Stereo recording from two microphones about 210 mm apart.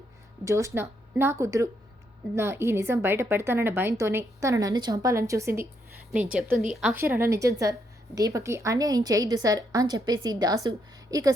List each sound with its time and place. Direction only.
0.4 s a woman's voice: 15° right (ahead or behind)